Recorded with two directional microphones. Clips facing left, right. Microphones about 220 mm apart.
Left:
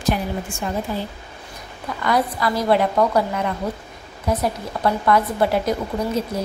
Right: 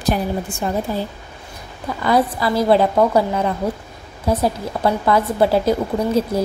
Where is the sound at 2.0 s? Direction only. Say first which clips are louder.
Right 3 dB; 30° right (ahead or behind).